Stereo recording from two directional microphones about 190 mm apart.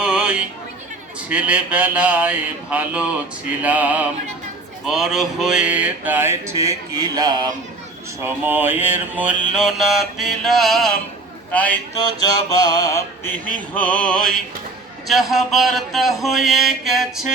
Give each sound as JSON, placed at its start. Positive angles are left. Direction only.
{"t": 0.0, "sound": "a sound", "side_deg": -5}
{"t": 8.2, "sound": "mantra", "side_deg": -10}
{"t": 11.5, "sound": "speech", "side_deg": 10}
{"t": 11.9, "sound": "mantra", "side_deg": 20}
{"t": 13.5, "sound": "mantra", "side_deg": 5}